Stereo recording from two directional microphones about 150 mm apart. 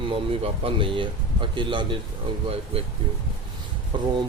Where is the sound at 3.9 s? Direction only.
30° right (ahead or behind).